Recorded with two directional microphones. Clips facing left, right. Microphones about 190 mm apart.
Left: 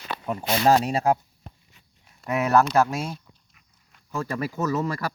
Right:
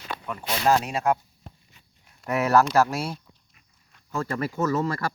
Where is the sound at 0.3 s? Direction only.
35° left (ahead or behind).